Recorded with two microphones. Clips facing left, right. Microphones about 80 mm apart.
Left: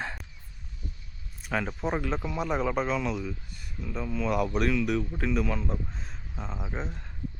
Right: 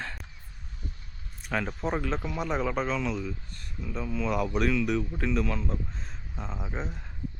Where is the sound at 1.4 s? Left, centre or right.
Centre.